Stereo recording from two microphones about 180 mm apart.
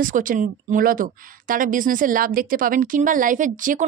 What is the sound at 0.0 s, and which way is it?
A woman's voice, 50° right (ahead or behind).